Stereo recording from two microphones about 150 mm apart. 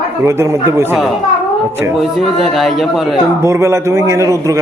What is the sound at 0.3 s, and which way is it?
Speech, 20° right (ahead or behind).